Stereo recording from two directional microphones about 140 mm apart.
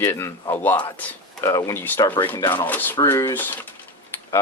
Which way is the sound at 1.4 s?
25° left (ahead or behind).